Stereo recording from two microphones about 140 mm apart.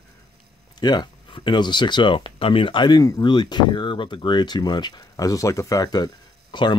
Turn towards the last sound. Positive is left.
turn(degrees=30)  # may be behind; listen again after turning